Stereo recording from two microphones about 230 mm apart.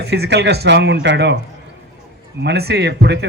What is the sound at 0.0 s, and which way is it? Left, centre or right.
A man's voice, right.